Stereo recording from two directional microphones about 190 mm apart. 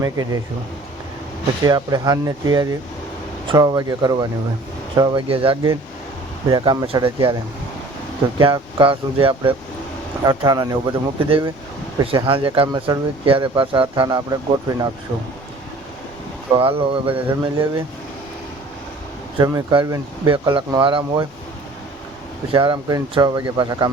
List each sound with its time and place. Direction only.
0.0 s speech: 20° right (ahead or behind)
1.6 s speech: 20° right (ahead or behind)
8.4 s speech: 25° right (ahead or behind)
16.6 s speech: 30° right (ahead or behind)
19.4 s speech: 20° right (ahead or behind)
22.5 s speech: 25° right (ahead or behind)